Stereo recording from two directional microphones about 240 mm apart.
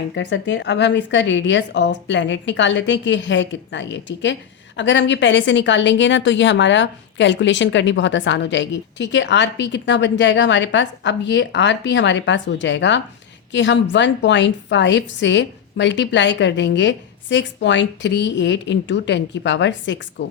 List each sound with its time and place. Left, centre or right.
0.1 s a woman's voice: left